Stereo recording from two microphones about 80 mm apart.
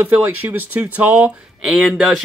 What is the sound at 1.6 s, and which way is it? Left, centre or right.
Speech, centre.